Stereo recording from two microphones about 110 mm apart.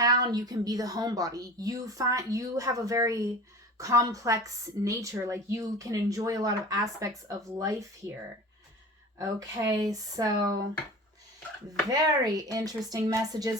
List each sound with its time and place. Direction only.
0.0 s a woman's voice: 35° right (ahead or behind)
9.6 s a woman's voice: 35° right (ahead or behind)
11.9 s a woman's voice: 35° right (ahead or behind)